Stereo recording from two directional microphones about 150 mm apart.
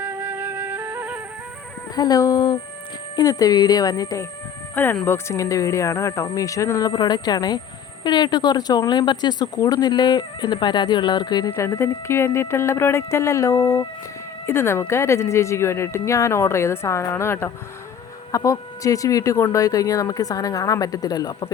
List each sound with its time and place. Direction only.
0.0 s music: 15° right (ahead or behind)
2.0 s speech: 25° left (ahead or behind)
4.7 s speech: 10° left (ahead or behind); by 11.5 s 30° left (ahead or behind)
11.5 s speech: 20° left (ahead or behind)